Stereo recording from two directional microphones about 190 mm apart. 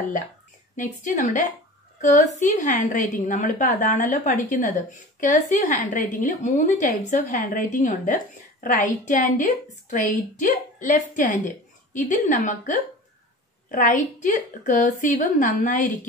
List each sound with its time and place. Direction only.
0.7 s a woman's voice: 40° left (ahead or behind)